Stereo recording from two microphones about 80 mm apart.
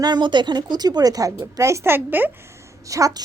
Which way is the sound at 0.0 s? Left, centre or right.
Right.